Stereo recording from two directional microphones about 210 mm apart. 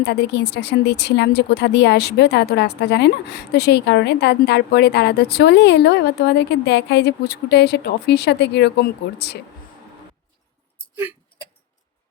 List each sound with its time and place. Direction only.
0.0 s speech: 55° left (ahead or behind)